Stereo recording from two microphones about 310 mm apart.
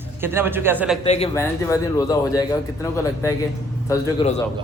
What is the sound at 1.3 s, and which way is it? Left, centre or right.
Speech, centre.